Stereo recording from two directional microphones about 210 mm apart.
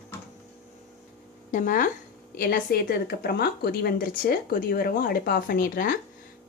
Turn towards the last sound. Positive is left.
turn(degrees=40)  # may be behind; listen again after turning